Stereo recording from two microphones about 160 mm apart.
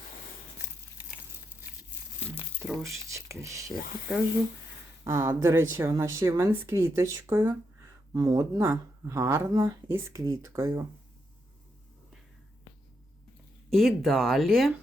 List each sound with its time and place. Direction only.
2.3 s speech: 10° right (ahead or behind)
5.0 s speech: 15° right (ahead or behind)
13.7 s speech: centre (ahead or behind)